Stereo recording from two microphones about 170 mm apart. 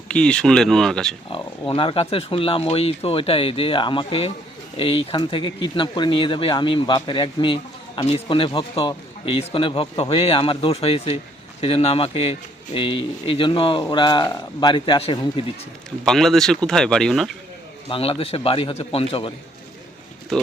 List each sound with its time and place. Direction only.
0.1 s speech: 5° left (ahead or behind)
1.3 s speech: 30° left (ahead or behind)
16.0 s speech: centre (ahead or behind)
17.8 s speech: 35° left (ahead or behind)